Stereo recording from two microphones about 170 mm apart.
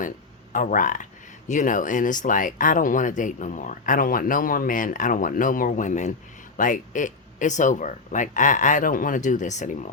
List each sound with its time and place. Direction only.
0.5 s speech: 50° left (ahead or behind)